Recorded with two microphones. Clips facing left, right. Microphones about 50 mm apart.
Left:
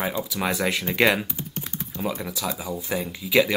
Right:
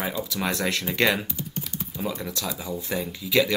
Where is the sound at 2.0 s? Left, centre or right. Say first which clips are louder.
Left 2 dB; centre.